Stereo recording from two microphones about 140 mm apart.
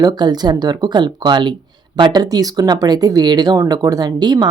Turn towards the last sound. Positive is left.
turn(degrees=-30)  # may be behind; listen again after turning